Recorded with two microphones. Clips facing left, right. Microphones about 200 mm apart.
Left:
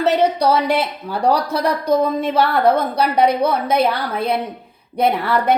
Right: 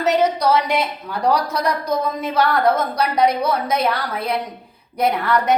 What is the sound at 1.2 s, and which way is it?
A woman's voice, 30° left (ahead or behind).